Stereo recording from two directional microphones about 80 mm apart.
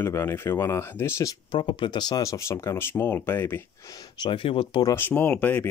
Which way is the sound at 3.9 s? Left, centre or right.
Left.